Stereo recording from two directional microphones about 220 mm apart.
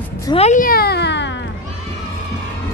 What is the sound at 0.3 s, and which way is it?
Speech, 30° left (ahead or behind).